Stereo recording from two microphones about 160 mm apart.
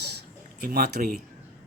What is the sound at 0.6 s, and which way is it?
Speech, 70° right (ahead or behind).